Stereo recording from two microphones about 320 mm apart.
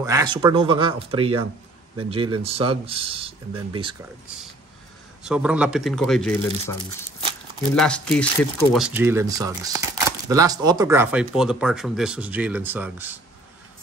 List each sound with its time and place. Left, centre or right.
0.0 s speech: centre
5.2 s speech: centre